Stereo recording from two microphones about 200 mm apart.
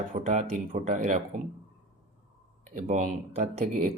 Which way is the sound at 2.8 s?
40° right (ahead or behind).